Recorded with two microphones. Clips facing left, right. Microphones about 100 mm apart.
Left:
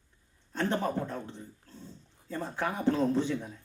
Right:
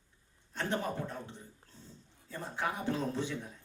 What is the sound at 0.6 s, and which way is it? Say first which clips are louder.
Speech: left 5 dB; 50° left (ahead or behind).